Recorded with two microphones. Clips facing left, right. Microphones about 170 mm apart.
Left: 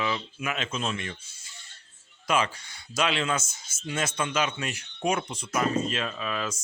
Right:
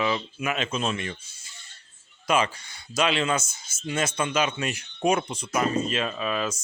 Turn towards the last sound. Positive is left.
turn(degrees=-15)  # may be behind; listen again after turning